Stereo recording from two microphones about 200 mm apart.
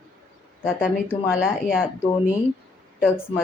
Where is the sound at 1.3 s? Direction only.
5° right (ahead or behind).